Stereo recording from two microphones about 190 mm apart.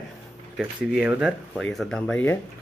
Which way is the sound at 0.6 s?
5° right (ahead or behind).